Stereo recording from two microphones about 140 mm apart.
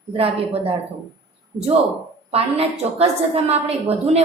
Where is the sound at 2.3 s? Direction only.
45° right (ahead or behind).